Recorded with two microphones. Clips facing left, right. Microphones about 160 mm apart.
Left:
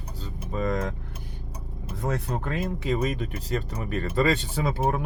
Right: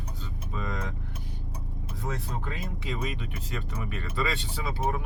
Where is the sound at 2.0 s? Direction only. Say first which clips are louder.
Left 6 dB; 50° left (ahead or behind).